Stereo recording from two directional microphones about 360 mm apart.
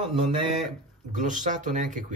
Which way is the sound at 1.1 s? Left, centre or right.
Right.